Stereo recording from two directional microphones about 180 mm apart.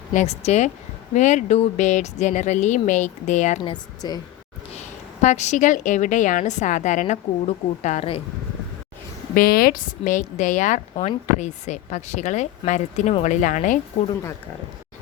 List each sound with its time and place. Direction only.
0.1 s a woman's voice: 40° left (ahead or behind)
3.6 s a woman's voice: 25° left (ahead or behind)
4.7 s a woman's voice: 40° left (ahead or behind)
9.3 s a woman's voice: 55° left (ahead or behind)